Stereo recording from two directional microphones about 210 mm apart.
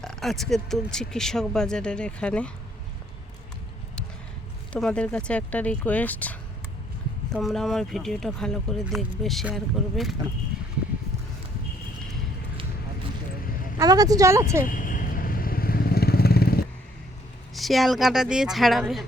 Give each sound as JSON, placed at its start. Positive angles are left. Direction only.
{"t": 0.0, "sound": "speech", "side_deg": 0}
{"t": 4.7, "sound": "speech", "side_deg": 5}
{"t": 7.3, "sound": "speech", "side_deg": 0}
{"t": 13.7, "sound": "speech", "side_deg": -15}
{"t": 14.7, "sound": "vehicle", "side_deg": 40}
{"t": 17.5, "sound": "speech", "side_deg": 0}